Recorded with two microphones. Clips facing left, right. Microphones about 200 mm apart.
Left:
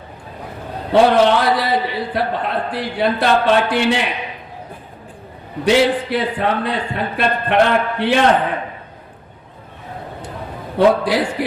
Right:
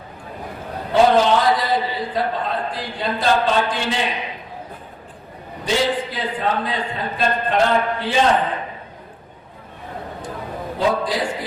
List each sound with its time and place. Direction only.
0.9 s a man's voice: 65° left (ahead or behind)
5.6 s a man's voice: 70° left (ahead or behind)
10.8 s a man's voice: 70° left (ahead or behind)